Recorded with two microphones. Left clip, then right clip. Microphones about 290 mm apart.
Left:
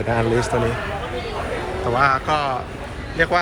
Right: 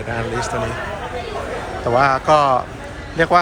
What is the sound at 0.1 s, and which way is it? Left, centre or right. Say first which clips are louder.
Speech: left 3 dB; centre.